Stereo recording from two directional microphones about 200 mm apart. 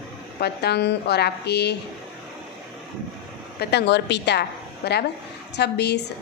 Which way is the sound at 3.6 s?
55° left (ahead or behind).